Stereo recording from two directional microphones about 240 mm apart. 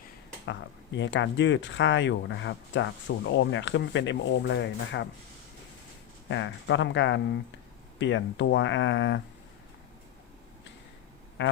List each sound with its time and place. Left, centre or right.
0.9 s speech: left
6.3 s speech: left
11.4 s duck: left